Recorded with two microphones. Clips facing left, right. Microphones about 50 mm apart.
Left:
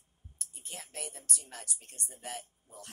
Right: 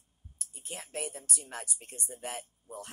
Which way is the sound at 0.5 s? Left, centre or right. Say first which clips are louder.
Right 6 dB; centre.